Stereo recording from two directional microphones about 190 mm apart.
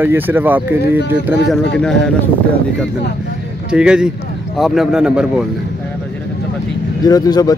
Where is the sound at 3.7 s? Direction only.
5° right (ahead or behind).